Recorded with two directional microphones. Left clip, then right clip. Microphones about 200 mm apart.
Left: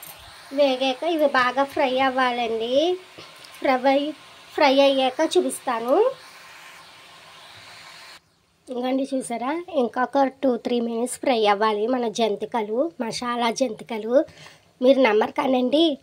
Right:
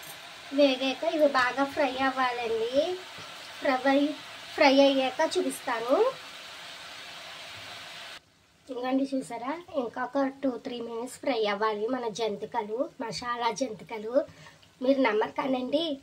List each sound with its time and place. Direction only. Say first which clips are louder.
0.6 s speech: left 4 dB; 45° left (ahead or behind)
3.6 s speech: left 5 dB; 40° left (ahead or behind)
8.8 s speech: left 4 dB; 40° left (ahead or behind)